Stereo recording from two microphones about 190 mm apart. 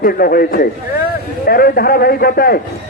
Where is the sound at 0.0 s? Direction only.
50° left (ahead or behind).